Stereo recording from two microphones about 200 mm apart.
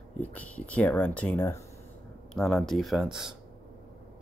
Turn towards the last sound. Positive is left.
turn(degrees=0)  # may be behind; listen again after turning